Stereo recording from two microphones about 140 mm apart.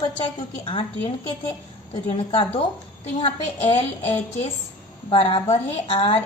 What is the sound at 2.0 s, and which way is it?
A woman's voice, 45° left (ahead or behind).